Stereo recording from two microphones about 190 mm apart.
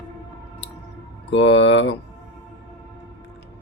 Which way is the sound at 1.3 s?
70° left (ahead or behind).